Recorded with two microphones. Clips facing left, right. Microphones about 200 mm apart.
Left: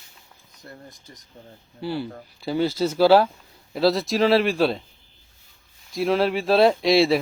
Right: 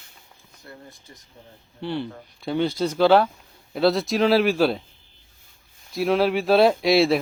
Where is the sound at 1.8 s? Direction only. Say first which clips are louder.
Even; 5° left (ahead or behind).